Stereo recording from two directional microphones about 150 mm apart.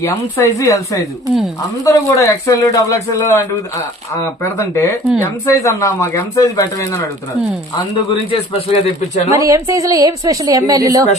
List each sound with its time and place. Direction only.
0.0 s speech: 20° left (ahead or behind)
8.3 s speech: 40° left (ahead or behind)
9.3 s a woman's voice: 20° right (ahead or behind)